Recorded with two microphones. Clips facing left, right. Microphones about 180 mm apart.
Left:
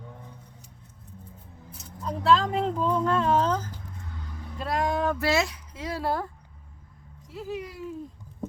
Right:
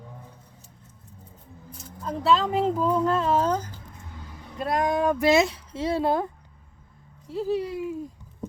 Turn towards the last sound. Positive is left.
turn(degrees=-10)  # may be behind; listen again after turning